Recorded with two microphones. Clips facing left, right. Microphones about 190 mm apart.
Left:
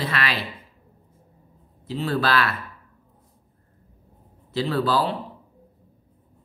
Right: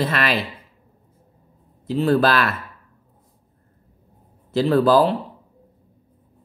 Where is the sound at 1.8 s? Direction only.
45° right (ahead or behind).